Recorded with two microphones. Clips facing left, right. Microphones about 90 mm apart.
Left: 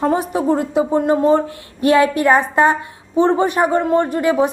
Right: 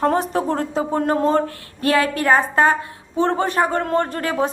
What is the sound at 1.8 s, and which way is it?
A woman's voice, 20° left (ahead or behind).